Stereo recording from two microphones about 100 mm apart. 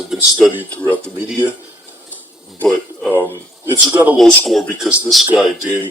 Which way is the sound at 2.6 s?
10° left (ahead or behind).